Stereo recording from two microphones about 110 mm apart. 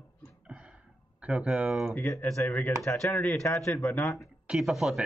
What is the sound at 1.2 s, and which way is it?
Speech, 10° right (ahead or behind).